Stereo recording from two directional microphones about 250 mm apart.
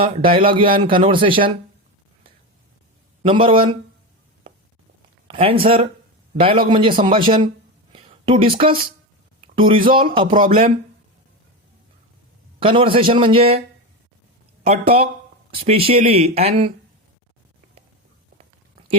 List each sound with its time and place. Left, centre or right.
0.0 s speech: centre
3.2 s speech: right
5.3 s speech: right
7.9 s a sound: right
9.6 s speech: centre
12.5 s speech: right
14.6 s speech: right